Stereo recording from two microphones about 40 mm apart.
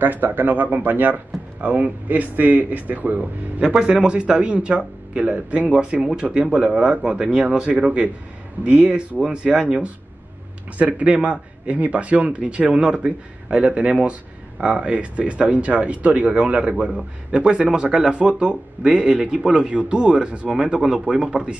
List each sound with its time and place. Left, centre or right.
0.0 s speech: right
3.8 s speech: right
5.8 s speech: right; by 7.8 s centre
8.6 s speech: right
20.8 s speech: centre
21.3 s speech: right